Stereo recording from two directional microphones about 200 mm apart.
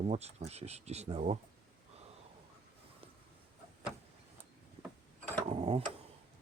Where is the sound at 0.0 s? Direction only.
30° right (ahead or behind).